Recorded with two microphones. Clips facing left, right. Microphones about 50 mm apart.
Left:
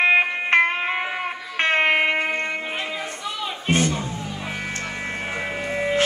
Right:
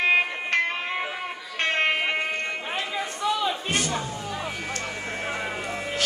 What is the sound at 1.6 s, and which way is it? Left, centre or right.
Music, left.